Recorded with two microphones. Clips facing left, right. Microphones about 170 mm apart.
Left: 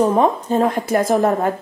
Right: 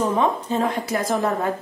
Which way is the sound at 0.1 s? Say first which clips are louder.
Left 5 dB; 50° left (ahead or behind).